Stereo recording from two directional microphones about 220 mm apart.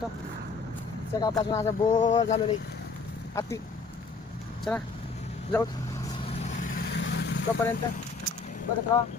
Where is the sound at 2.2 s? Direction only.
30° left (ahead or behind).